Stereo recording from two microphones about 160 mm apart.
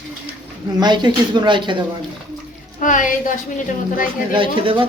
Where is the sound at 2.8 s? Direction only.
55° left (ahead or behind).